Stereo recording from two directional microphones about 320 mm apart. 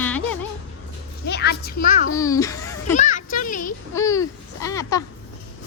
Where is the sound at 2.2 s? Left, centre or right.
Centre.